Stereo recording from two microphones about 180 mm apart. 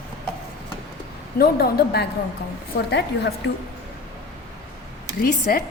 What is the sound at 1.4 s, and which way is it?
A woman's voice, 60° left (ahead or behind).